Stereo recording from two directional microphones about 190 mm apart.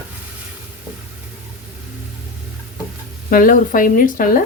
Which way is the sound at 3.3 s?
50° left (ahead or behind).